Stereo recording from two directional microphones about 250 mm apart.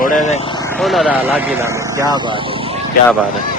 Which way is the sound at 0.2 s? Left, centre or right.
Left.